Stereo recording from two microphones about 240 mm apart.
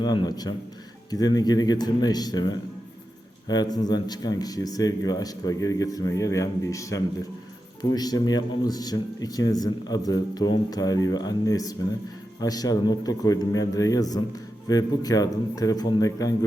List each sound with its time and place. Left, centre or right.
0.0 s speech: centre